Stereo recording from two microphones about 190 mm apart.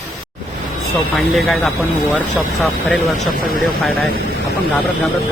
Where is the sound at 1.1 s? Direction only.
Centre (ahead or behind).